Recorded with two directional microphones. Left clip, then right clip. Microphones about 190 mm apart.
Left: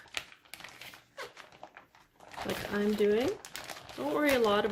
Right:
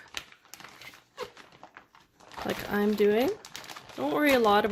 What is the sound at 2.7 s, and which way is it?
Speech, 50° right (ahead or behind).